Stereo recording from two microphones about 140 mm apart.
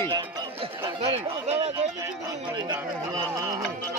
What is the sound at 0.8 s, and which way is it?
Speech, 40° right (ahead or behind).